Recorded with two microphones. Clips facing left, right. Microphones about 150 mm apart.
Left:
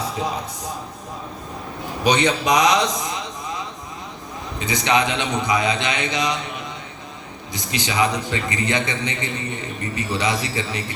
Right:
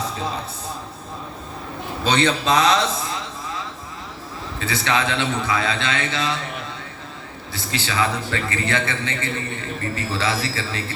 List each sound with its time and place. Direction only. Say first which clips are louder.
0.0 s music: left 2 dB; 15° left (ahead or behind)
2.0 s a man's voice: left 1 dB; 15° left (ahead or behind)
4.6 s a man's voice: left 2 dB; 15° left (ahead or behind)
7.5 s a man's voice: left 1 dB; 15° left (ahead or behind)